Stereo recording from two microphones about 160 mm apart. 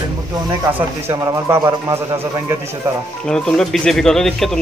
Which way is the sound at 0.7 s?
15° right (ahead or behind).